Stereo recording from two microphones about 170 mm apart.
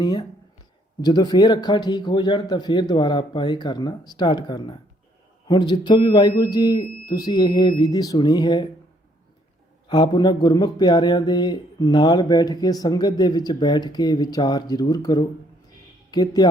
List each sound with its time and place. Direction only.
0.0 s speech: 25° left (ahead or behind)
9.9 s speech: 25° left (ahead or behind)